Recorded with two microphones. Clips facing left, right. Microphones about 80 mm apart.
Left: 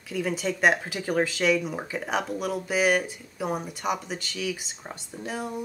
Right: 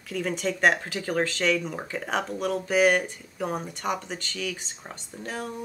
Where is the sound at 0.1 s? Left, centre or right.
Centre.